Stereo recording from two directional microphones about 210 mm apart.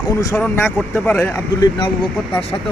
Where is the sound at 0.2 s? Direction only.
15° left (ahead or behind).